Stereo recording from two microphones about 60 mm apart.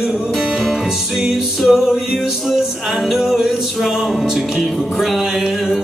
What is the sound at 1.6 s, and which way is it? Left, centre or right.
Music, centre.